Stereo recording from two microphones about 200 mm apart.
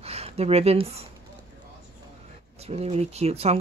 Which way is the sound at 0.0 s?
30° right (ahead or behind).